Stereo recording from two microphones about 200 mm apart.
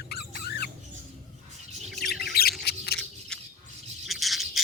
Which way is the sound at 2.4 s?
50° left (ahead or behind).